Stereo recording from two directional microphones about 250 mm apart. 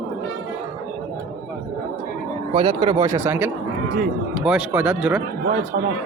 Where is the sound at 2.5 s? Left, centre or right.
Centre.